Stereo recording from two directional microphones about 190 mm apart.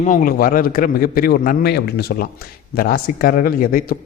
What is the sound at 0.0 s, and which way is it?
A man's voice, 45° left (ahead or behind).